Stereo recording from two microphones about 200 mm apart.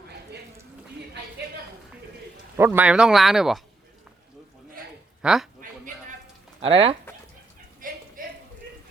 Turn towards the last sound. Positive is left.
turn(degrees=-45)  # may be behind; listen again after turning